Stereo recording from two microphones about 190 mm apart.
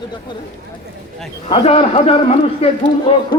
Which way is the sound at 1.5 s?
30° left (ahead or behind).